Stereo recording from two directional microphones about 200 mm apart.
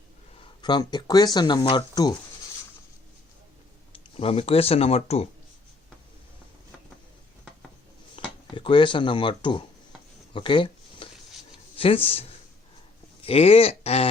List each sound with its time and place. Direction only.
0.6 s speech: 20° left (ahead or behind)
3.9 s speech: 30° left (ahead or behind)
8.2 s a sound: 25° left (ahead or behind)
8.5 s speech: 25° left (ahead or behind)
10.3 s a sound: 25° left (ahead or behind)
11.8 s speech: 30° left (ahead or behind)
13.2 s speech: 30° left (ahead or behind)